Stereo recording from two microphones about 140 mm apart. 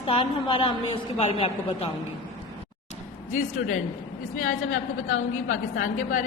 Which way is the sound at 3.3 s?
65° left (ahead or behind).